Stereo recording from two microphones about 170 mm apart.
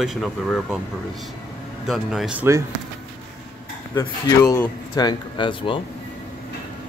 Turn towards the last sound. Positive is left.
turn(degrees=30)  # may be behind; listen again after turning